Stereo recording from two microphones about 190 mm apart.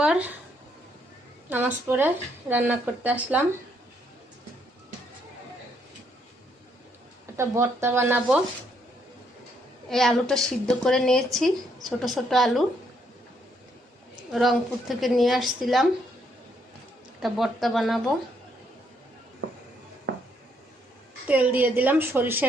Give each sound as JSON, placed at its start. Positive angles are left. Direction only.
{"t": 0.0, "sound": "a sound", "side_deg": -5}
{"t": 1.5, "sound": "a woman's voice", "side_deg": -10}
{"t": 7.3, "sound": "a woman's voice", "side_deg": -15}
{"t": 9.9, "sound": "a woman's voice", "side_deg": 0}
{"t": 14.3, "sound": "a woman's voice", "side_deg": 0}
{"t": 17.2, "sound": "a woman's voice", "side_deg": 0}
{"t": 20.1, "sound": "a sound", "side_deg": -60}
{"t": 21.2, "sound": "a woman's voice", "side_deg": -10}